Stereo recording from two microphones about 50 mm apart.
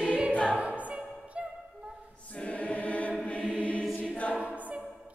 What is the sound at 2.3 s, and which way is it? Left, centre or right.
Choir, left.